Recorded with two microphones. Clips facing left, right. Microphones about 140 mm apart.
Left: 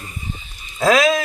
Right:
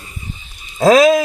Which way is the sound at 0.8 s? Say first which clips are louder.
Right 6 dB; 40° right (ahead or behind).